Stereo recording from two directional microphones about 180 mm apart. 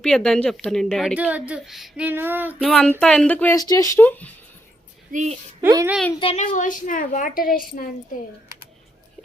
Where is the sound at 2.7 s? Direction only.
5° left (ahead or behind).